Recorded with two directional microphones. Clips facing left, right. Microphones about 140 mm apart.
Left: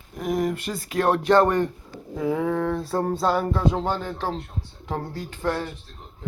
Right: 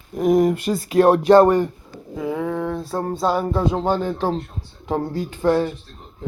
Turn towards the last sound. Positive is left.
turn(degrees=-15)  # may be behind; listen again after turning